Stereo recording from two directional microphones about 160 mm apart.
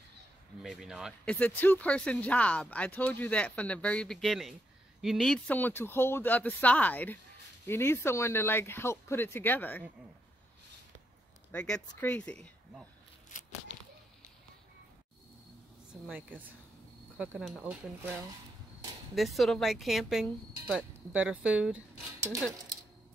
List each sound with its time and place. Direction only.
0.6 s speech: centre (ahead or behind)
1.3 s speech: 10° left (ahead or behind)
11.5 s speech: 5° left (ahead or behind)
13.3 s speech: 55° left (ahead or behind)
15.9 s speech: 10° right (ahead or behind)
19.1 s speech: centre (ahead or behind)